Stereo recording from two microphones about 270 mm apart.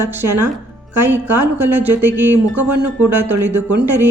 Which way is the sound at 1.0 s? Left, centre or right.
Centre.